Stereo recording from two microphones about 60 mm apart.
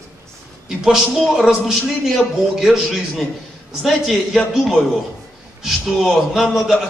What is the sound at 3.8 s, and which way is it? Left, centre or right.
A man's voice, centre.